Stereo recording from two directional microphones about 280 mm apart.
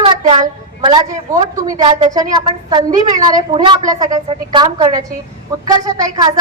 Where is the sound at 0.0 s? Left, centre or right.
Centre.